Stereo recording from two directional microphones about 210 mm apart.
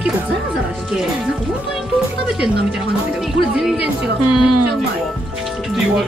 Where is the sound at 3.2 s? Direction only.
Centre (ahead or behind).